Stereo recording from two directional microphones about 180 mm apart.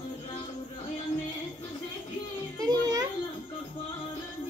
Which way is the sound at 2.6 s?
20° right (ahead or behind).